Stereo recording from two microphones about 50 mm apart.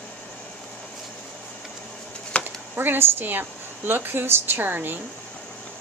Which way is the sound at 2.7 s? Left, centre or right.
Right.